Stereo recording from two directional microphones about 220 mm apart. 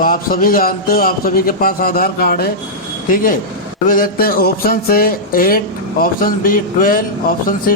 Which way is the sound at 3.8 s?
40° left (ahead or behind).